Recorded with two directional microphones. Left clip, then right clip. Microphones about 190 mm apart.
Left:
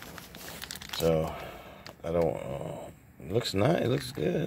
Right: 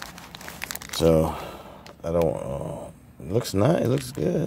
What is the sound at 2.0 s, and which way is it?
Speech, 15° right (ahead or behind).